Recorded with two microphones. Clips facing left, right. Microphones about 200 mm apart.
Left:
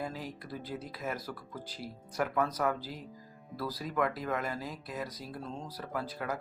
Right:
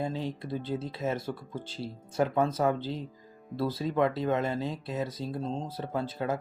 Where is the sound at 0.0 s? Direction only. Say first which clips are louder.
Right 6 dB; 25° right (ahead or behind).